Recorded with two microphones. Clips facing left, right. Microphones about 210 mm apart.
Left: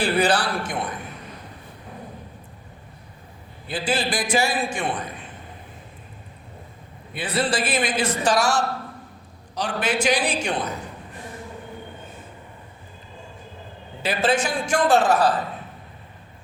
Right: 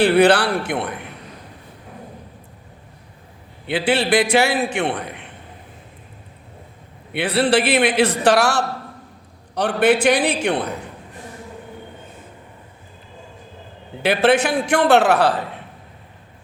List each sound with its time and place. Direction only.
0.0 s a man's voice: 60° right (ahead or behind)
3.7 s a man's voice: 65° right (ahead or behind)
7.1 s a man's voice: 65° right (ahead or behind)
14.0 s a man's voice: 60° right (ahead or behind)